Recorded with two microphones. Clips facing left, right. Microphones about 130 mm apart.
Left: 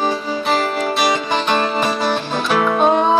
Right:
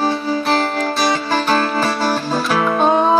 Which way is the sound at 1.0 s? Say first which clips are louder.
Right 1 dB; 20° left (ahead or behind).